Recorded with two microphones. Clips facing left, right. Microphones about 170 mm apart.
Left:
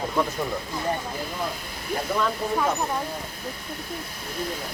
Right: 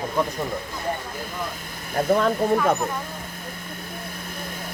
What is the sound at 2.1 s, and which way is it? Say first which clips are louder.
Speech: right 6 dB; 50° right (ahead or behind).